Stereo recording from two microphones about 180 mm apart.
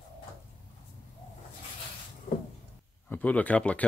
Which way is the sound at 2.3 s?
50° left (ahead or behind).